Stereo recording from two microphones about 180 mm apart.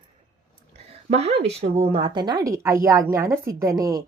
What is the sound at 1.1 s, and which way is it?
A woman's voice, 35° right (ahead or behind).